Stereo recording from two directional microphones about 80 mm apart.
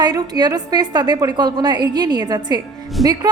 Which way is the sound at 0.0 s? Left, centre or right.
Right.